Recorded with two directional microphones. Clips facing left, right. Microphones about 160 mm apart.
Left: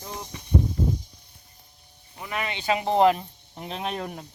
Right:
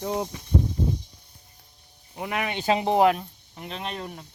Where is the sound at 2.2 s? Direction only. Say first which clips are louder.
Right 3 dB; 60° right (ahead or behind).